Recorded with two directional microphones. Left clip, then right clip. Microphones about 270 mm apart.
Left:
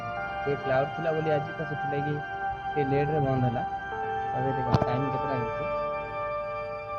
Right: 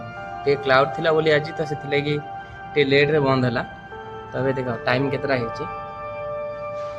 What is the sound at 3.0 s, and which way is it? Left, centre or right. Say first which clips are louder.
Speech: right 9 dB; right.